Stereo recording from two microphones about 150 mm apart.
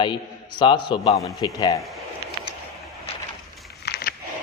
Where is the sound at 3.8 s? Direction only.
90° left.